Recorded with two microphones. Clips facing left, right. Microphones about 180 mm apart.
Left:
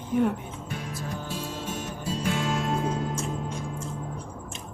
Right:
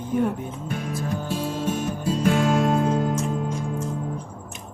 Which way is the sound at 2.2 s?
55° right (ahead or behind).